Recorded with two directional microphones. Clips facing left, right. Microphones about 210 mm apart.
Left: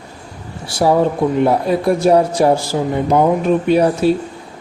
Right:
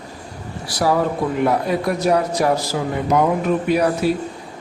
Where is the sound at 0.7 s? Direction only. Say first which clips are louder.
Left 5 dB; 25° left (ahead or behind).